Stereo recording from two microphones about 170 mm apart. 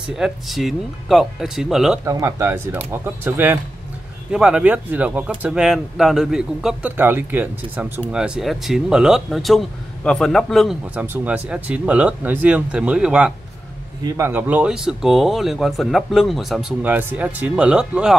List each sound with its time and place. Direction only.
0.1 s speech: centre (ahead or behind)
2.0 s speech: 20° right (ahead or behind); by 10.8 s centre (ahead or behind)
11.0 s speech: 10° right (ahead or behind)
14.0 s speech: 15° right (ahead or behind)